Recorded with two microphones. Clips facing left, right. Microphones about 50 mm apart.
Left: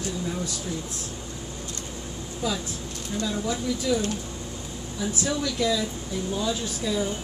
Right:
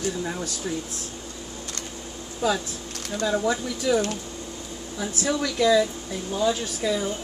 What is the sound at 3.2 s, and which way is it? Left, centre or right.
Speech, right.